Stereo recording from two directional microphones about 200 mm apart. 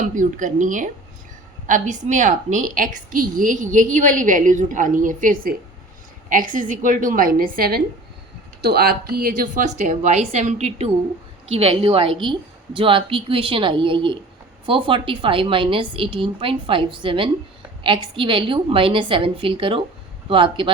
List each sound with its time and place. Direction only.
0.0 s a woman's voice: 40° right (ahead or behind)